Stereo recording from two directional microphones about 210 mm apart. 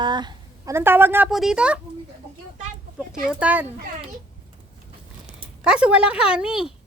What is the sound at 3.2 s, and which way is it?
Speech, 5° right (ahead or behind).